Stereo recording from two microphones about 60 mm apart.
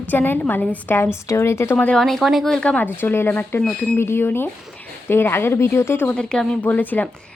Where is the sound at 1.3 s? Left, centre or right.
Left.